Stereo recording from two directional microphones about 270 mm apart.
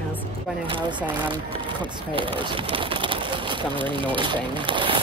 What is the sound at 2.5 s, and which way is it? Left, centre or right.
Speech, centre.